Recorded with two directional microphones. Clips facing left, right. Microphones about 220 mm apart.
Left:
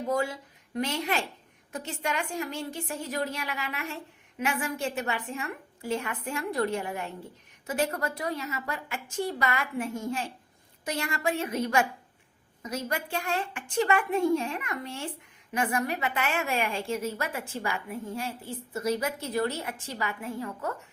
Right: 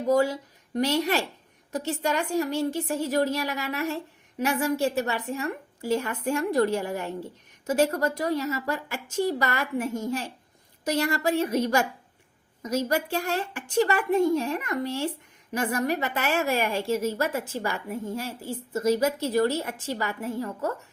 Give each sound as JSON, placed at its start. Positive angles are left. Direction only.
{"t": 0.1, "sound": "a woman's voice", "side_deg": -40}